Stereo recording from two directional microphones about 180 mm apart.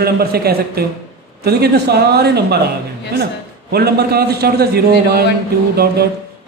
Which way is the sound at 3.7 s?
60° right (ahead or behind).